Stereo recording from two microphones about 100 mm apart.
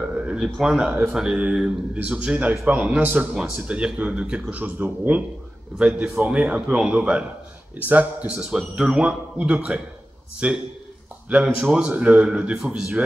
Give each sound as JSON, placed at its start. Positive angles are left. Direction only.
{"t": 0.1, "sound": "speech", "side_deg": -10}
{"t": 8.4, "sound": "speech", "side_deg": -5}